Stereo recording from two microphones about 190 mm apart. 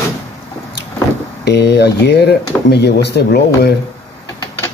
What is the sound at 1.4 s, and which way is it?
Speech, 60° left (ahead or behind).